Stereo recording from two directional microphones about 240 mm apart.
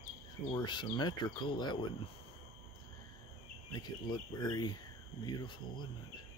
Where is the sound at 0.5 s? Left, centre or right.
Centre.